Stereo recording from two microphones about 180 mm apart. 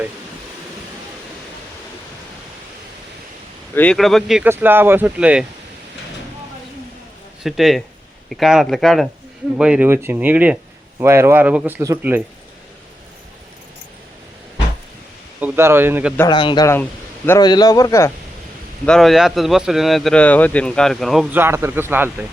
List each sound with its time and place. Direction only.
3.8 s a man's voice: 5° left (ahead or behind)
4.4 s speech: 10° right (ahead or behind)
7.4 s a man's voice: centre (ahead or behind)
15.4 s speech: 10° right (ahead or behind)
16.3 s speech: 25° left (ahead or behind)
18.9 s a man's voice: centre (ahead or behind)
21.3 s speech: 15° right (ahead or behind)